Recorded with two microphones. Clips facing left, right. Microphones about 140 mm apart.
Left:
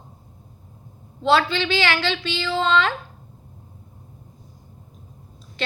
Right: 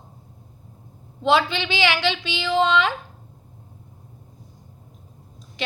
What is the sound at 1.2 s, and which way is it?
A woman's voice, 15° right (ahead or behind).